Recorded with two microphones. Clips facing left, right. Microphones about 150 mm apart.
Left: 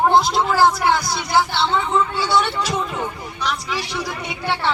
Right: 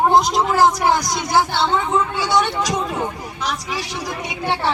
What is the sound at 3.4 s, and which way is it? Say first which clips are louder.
Speech: left 1 dB; 45° right (ahead or behind).